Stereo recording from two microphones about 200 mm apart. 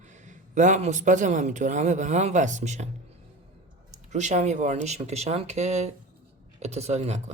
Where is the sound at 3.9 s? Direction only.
35° right (ahead or behind).